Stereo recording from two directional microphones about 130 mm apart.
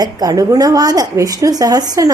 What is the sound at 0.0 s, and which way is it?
Speech, 30° right (ahead or behind).